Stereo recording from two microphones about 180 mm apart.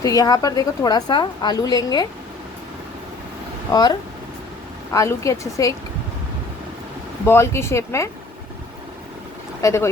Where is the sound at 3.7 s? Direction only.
20° left (ahead or behind).